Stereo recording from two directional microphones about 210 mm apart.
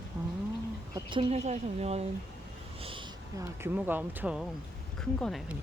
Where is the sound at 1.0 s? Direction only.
25° right (ahead or behind).